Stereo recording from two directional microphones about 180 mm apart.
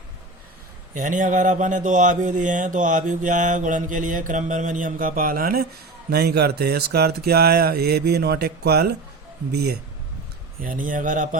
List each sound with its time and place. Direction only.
0.9 s speech: 45° right (ahead or behind); by 9.7 s 65° right (ahead or behind)
10.6 s speech: 50° right (ahead or behind)